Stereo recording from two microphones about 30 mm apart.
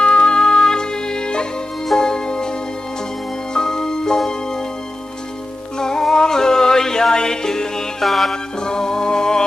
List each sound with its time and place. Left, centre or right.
0.0 s music: left
5.7 s music: left
8.0 s music: centre
8.3 s music: left